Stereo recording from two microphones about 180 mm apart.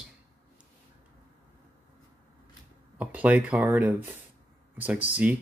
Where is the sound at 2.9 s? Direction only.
10° right (ahead or behind).